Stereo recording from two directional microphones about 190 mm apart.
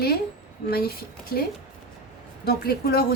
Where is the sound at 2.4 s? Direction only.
55° left (ahead or behind).